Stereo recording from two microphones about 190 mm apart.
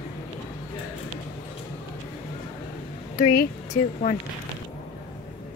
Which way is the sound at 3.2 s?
40° left (ahead or behind).